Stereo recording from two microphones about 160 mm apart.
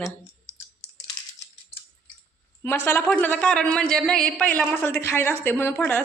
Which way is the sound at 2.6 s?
15° left (ahead or behind).